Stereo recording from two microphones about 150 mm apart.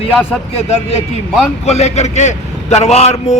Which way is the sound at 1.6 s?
45° left (ahead or behind).